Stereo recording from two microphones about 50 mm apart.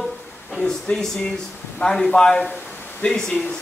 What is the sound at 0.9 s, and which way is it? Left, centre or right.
Speech, left.